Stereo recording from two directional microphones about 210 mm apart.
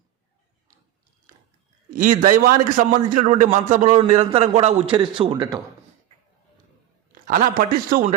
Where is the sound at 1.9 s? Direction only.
40° right (ahead or behind); by 5.5 s 20° right (ahead or behind).